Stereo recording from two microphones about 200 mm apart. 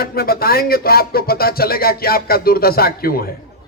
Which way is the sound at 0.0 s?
50° left (ahead or behind).